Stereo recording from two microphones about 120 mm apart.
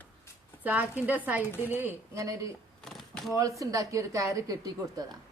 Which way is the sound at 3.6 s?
25° right (ahead or behind).